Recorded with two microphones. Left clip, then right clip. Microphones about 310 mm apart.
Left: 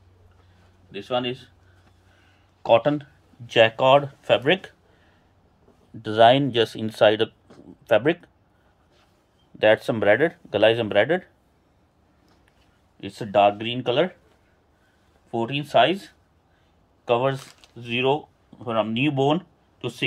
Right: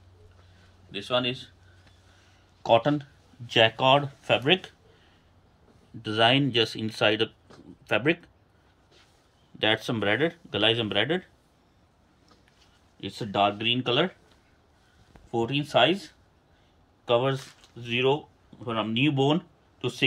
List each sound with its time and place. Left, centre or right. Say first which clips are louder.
0.9 s a man's voice: left 1 dB; centre
2.6 s speech: left 3 dB; centre
6.0 s speech: left 6 dB; centre
9.6 s speech: left 7 dB; centre
13.0 s speech: left 6 dB; centre
15.3 s speech: left 4 dB; centre